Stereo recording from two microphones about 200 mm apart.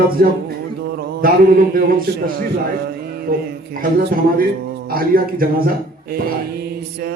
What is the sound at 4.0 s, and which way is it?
Speech, 45° right (ahead or behind).